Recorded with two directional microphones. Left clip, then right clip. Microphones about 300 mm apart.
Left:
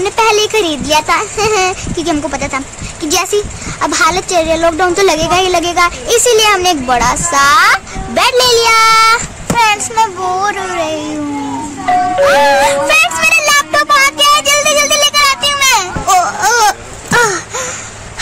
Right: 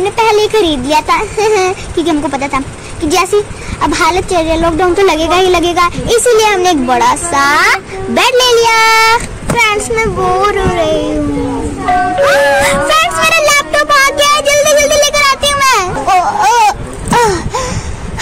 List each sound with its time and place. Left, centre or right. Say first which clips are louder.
0.0 s a woman's voice: right 1 dB; centre
10.4 s speech: right 4 dB; centre
11.8 s music: even; centre
16.2 s a sound: right 3 dB; centre